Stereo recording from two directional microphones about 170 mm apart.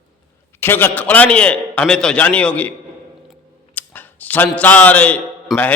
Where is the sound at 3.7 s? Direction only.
10° left (ahead or behind).